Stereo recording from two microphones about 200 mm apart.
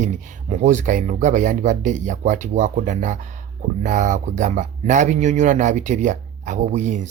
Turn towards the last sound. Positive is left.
turn(degrees=-35)  # may be behind; listen again after turning